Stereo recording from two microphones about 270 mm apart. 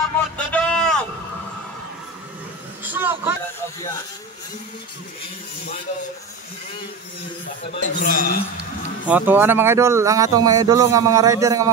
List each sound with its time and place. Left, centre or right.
0.4 s a sound: centre
2.8 s vehicle: centre
7.7 s speech: left
9.1 s speech: centre